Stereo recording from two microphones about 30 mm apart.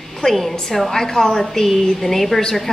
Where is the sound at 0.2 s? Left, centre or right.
Centre.